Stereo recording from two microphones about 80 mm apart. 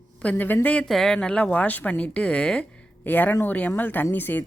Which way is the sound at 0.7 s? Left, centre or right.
Centre.